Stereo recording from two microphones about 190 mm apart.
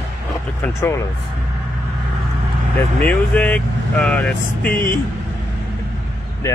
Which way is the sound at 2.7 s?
5° left (ahead or behind).